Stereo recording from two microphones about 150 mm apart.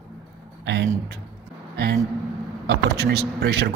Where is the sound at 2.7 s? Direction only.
90° right.